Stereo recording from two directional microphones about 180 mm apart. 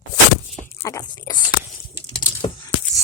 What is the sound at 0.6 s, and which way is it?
Speech, 15° left (ahead or behind).